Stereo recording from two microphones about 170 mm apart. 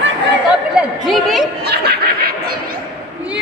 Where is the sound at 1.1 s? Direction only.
Centre (ahead or behind).